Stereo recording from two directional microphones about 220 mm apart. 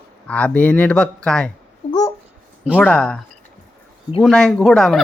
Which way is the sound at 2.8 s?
5° left (ahead or behind).